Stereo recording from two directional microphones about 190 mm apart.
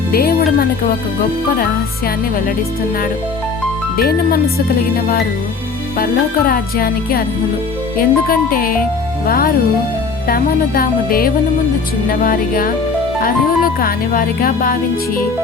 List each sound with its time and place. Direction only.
0.1 s speech: 55° left (ahead or behind)
3.9 s speech: 55° left (ahead or behind)
6.5 s speech: 50° left (ahead or behind)